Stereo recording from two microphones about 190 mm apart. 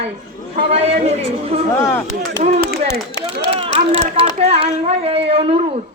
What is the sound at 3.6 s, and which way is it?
A woman's voice, 30° right (ahead or behind).